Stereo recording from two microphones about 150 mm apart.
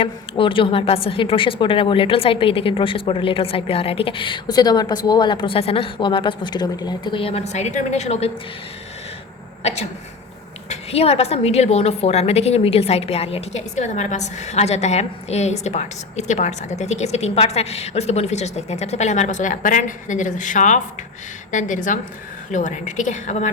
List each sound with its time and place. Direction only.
0.0 s a woman's voice: 35° left (ahead or behind)
10.7 s a woman's voice: 40° left (ahead or behind)